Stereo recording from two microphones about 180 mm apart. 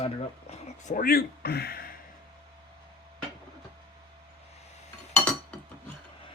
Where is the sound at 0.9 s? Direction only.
55° left (ahead or behind).